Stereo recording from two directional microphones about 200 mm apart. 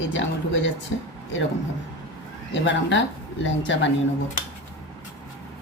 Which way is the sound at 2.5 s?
65° left (ahead or behind).